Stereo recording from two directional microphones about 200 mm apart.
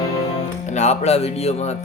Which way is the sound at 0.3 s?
35° left (ahead or behind).